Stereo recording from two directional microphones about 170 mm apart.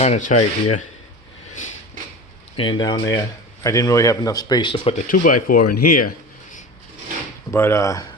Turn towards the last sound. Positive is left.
turn(degrees=20)  # may be behind; listen again after turning